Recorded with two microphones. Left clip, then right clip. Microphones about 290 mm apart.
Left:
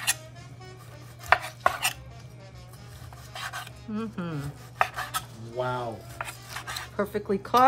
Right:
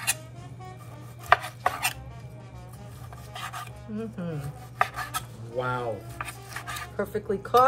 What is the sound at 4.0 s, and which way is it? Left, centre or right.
Speech, left.